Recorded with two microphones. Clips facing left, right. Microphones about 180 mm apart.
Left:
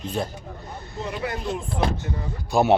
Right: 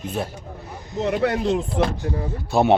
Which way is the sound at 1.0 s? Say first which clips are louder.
Right 9 dB; 70° right (ahead or behind).